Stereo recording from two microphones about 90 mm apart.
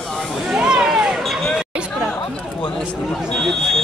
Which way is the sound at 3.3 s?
5° left (ahead or behind).